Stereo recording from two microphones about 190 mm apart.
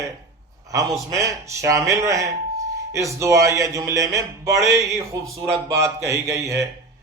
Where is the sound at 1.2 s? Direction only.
15° right (ahead or behind).